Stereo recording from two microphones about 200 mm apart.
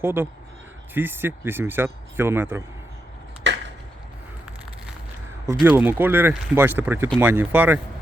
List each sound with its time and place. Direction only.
0.0 s speech: 10° right (ahead or behind)
3.5 s chop: 65° right (ahead or behind)
5.5 s speech: 10° right (ahead or behind)